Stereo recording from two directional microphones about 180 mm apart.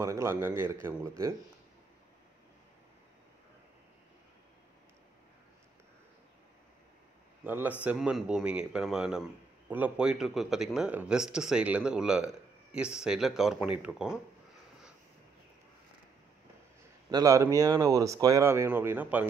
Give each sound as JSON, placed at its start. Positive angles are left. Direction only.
{"t": 0.0, "sound": "speech", "side_deg": -15}
{"t": 7.4, "sound": "a man's voice", "side_deg": -10}
{"t": 17.1, "sound": "speech", "side_deg": -20}